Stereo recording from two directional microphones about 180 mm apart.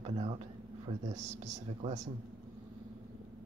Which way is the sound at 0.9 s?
35° right (ahead or behind).